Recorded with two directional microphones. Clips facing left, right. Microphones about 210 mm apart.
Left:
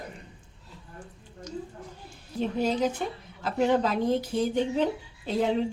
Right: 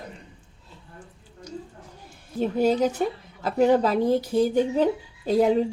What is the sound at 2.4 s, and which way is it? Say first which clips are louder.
A woman's voice: right 5 dB; 45° right (ahead or behind).